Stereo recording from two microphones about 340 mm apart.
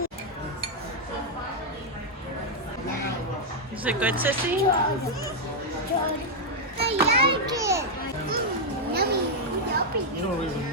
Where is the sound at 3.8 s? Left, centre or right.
Centre.